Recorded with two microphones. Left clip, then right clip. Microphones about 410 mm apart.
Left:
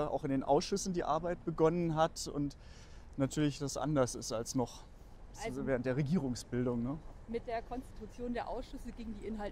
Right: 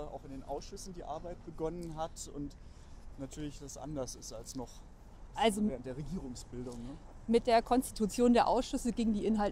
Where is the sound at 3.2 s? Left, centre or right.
Left.